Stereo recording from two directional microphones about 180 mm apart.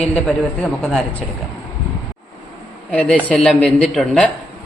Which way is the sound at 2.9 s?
5° left (ahead or behind).